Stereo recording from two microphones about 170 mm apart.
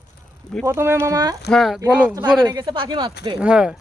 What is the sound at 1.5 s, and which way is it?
Speech, centre (ahead or behind).